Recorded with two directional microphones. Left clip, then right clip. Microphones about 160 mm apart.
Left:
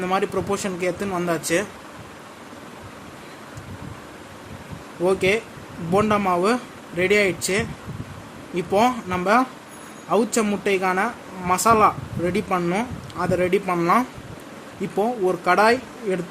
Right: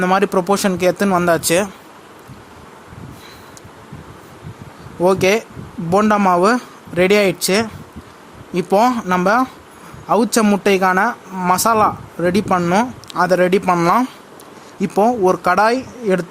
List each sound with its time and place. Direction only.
0.0 s speech: 60° right (ahead or behind)
5.0 s speech: 65° right (ahead or behind)